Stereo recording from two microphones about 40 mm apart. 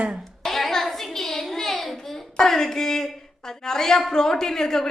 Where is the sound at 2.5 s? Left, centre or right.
Centre.